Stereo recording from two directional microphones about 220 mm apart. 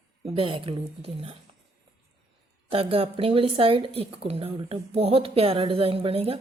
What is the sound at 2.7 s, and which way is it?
Speech, 25° right (ahead or behind).